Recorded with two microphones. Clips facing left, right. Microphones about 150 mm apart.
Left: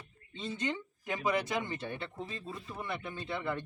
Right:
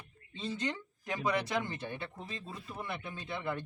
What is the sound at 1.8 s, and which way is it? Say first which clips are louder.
Speech: left 1 dB; 15° right (ahead or behind).